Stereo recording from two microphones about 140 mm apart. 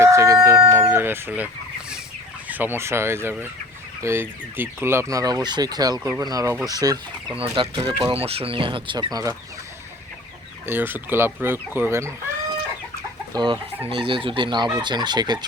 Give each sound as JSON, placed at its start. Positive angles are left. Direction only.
{"t": 0.0, "sound": "chicken", "side_deg": -20}
{"t": 2.5, "sound": "speech", "side_deg": -15}
{"t": 7.3, "sound": "speech", "side_deg": -40}
{"t": 10.7, "sound": "speech", "side_deg": -15}
{"t": 13.3, "sound": "speech", "side_deg": -35}